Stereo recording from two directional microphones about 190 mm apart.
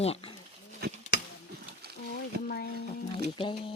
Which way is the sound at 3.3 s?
25° left (ahead or behind).